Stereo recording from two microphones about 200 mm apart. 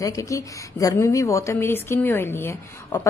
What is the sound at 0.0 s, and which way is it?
A woman's voice, 15° left (ahead or behind).